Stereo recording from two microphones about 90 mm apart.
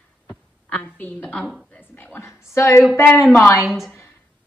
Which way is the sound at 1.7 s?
20° left (ahead or behind).